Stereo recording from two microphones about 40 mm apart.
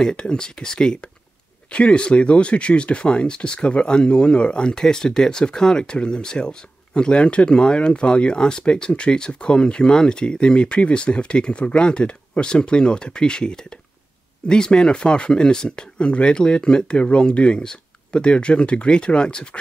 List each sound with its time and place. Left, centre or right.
0.0 s speech: centre